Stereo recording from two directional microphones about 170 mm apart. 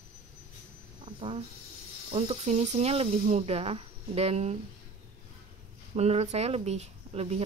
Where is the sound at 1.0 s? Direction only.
30° right (ahead or behind).